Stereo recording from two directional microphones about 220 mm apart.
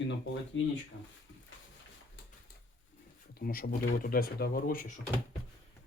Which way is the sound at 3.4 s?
40° left (ahead or behind).